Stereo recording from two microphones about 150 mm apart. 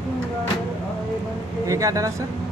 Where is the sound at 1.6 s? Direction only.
20° right (ahead or behind).